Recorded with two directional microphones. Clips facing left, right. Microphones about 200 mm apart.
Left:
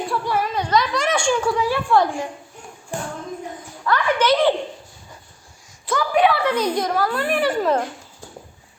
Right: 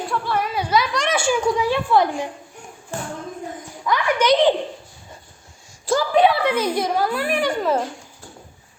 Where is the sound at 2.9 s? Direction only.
15° left (ahead or behind).